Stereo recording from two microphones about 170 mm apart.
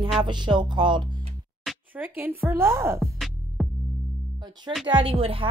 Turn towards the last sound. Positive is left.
turn(degrees=-30)  # may be behind; listen again after turning